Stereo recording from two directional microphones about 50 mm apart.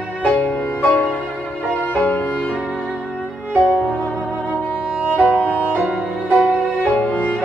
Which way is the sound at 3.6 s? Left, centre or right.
Left.